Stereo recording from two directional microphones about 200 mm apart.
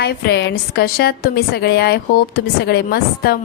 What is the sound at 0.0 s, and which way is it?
A woman's voice, 55° left (ahead or behind).